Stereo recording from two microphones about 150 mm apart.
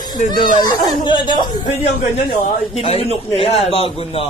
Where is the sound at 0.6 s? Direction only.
30° left (ahead or behind).